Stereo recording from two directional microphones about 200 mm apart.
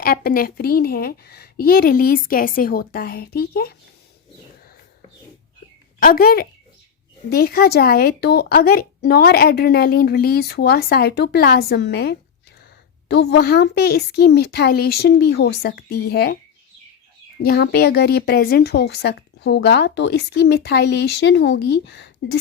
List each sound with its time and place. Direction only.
0.0 s speech: 45° left (ahead or behind)
6.0 s speech: 45° left (ahead or behind)
17.4 s a woman's voice: 50° left (ahead or behind)